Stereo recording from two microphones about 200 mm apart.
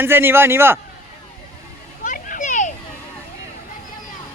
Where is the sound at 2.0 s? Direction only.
45° left (ahead or behind).